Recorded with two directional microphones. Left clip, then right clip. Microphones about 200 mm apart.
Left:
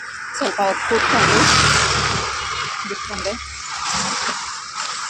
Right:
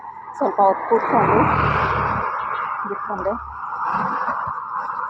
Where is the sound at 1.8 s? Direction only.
30° left (ahead or behind).